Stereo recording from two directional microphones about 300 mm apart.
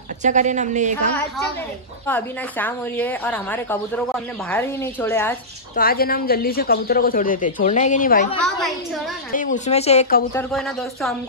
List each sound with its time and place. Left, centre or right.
0.2 s a woman's voice: right
2.0 s a woman's voice: centre
5.8 s speech: left
8.5 s a woman's voice: centre
9.3 s speech: left
10.3 s a woman's voice: centre